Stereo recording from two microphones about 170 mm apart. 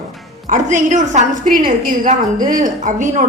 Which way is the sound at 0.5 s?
45° right (ahead or behind).